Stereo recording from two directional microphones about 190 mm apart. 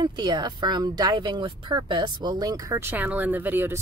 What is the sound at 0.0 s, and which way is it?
Speech, 20° right (ahead or behind).